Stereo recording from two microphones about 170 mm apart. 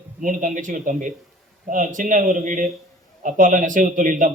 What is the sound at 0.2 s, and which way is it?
A man's voice, 50° right (ahead or behind).